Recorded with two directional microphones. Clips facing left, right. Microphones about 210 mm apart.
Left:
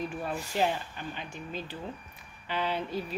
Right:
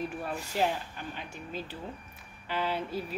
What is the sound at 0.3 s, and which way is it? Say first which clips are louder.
A woman's voice: left 1 dB; centre (ahead or behind).